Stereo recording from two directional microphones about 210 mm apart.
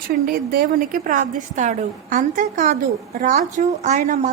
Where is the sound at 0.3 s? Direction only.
45° right (ahead or behind).